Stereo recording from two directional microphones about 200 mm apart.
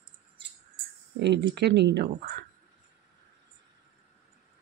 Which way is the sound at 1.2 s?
60° right (ahead or behind).